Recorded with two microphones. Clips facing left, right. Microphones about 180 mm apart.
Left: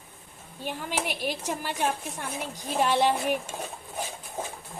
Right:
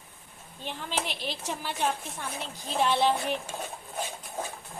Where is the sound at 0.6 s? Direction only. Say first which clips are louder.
Left 2 dB; 10° left (ahead or behind).